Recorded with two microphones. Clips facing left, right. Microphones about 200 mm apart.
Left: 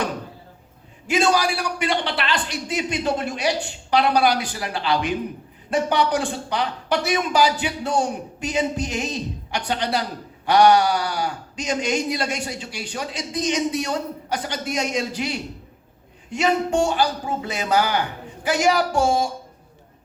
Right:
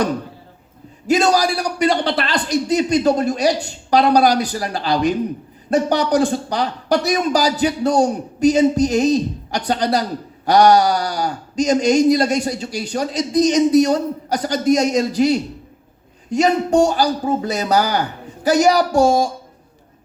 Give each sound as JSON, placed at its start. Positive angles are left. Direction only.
{"t": 1.0, "sound": "speech", "side_deg": -40}